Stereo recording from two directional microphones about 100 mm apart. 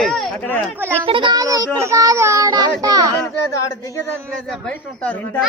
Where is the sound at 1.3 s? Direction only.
35° right (ahead or behind).